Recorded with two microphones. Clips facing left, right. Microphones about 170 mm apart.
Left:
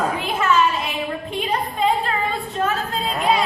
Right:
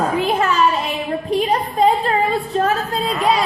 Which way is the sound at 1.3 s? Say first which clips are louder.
Right 9 dB; 35° right (ahead or behind).